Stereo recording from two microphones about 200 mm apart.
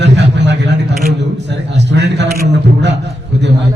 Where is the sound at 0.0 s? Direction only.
60° right (ahead or behind).